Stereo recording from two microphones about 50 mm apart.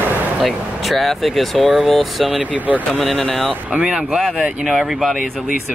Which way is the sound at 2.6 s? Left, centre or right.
Right.